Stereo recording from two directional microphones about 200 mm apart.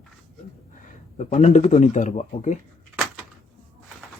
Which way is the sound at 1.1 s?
35° left (ahead or behind).